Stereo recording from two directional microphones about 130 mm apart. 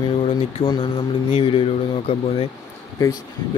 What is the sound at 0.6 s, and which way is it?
Speech, 35° left (ahead or behind).